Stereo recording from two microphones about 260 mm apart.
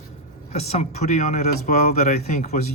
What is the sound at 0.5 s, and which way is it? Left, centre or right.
Speech, left.